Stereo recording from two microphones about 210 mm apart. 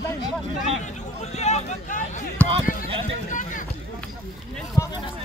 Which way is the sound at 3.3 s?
40° left (ahead or behind).